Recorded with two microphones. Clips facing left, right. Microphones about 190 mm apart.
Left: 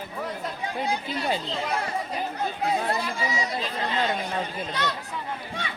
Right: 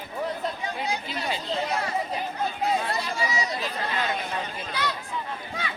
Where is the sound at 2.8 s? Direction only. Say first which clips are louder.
Left 1 dB; 50° left (ahead or behind).